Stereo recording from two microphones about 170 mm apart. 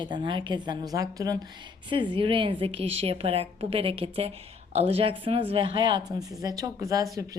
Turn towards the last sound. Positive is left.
turn(degrees=-20)  # may be behind; listen again after turning